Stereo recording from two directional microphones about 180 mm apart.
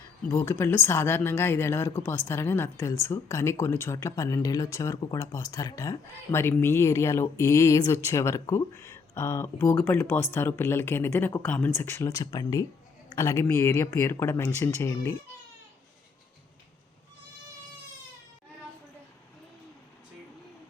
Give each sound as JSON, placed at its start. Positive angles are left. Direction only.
{"t": 0.3, "sound": "speech", "side_deg": 15}